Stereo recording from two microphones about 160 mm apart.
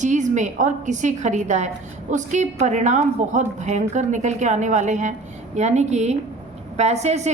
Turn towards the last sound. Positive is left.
turn(degrees=-45)  # may be behind; listen again after turning